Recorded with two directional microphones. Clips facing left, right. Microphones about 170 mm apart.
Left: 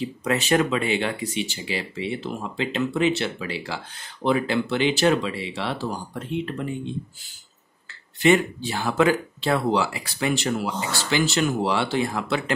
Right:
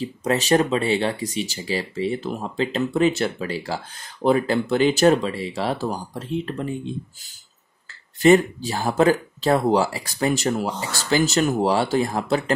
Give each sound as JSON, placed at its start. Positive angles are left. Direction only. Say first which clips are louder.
{"t": 0.0, "sound": "speech", "louder": "right 2 dB", "side_deg": -35}
{"t": 8.2, "sound": "speech", "louder": "right 4 dB", "side_deg": -40}